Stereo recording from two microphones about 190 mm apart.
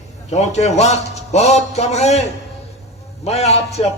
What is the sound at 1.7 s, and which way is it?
A man's voice, 35° left (ahead or behind).